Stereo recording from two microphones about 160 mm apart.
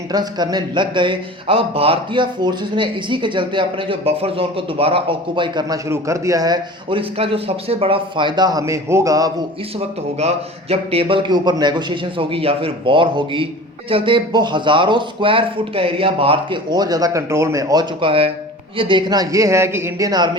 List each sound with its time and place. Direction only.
0.1 s speech: 25° right (ahead or behind)
7.2 s speech: 35° right (ahead or behind); by 9.3 s 20° right (ahead or behind)
9.7 s speech: 40° right (ahead or behind); by 20.3 s 25° right (ahead or behind)